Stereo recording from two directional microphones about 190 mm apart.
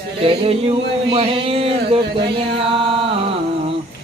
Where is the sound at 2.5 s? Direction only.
30° right (ahead or behind).